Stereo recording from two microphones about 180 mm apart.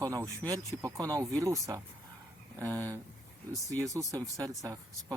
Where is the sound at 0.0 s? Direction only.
20° right (ahead or behind).